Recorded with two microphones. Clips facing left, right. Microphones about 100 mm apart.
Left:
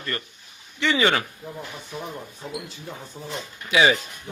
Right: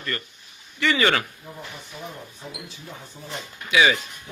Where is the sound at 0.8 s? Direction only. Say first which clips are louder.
Even; 20° left (ahead or behind).